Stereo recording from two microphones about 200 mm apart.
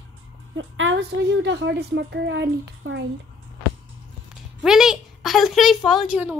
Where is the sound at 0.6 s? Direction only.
75° right (ahead or behind).